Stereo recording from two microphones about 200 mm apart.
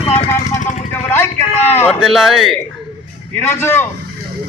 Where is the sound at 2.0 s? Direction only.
Centre (ahead or behind).